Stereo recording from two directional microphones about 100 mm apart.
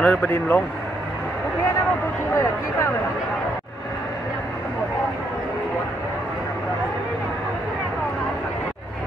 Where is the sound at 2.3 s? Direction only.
30° left (ahead or behind).